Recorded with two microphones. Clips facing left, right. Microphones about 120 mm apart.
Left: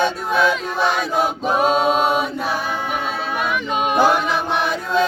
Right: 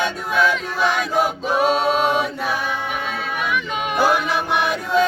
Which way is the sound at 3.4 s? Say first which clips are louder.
Left 3 dB; 40° left (ahead or behind).